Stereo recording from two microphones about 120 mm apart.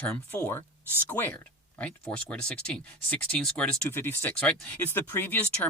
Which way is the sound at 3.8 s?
20° left (ahead or behind).